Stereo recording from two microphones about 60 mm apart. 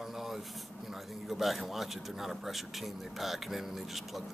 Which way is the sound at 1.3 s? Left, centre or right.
Centre.